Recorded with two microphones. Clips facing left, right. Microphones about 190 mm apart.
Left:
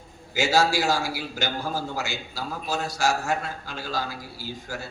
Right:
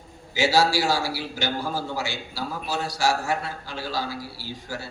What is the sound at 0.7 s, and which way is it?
A man's voice, 45° left (ahead or behind).